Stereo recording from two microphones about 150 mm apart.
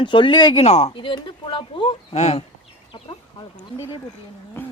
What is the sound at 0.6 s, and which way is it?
Speech, 45° left (ahead or behind).